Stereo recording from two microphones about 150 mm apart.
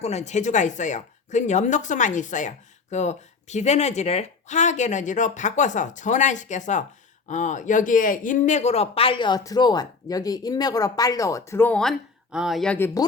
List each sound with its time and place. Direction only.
0.0 s speech: 45° left (ahead or behind); by 12.9 s 10° left (ahead or behind)